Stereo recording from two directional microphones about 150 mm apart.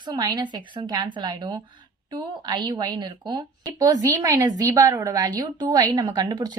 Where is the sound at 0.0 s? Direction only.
30° right (ahead or behind).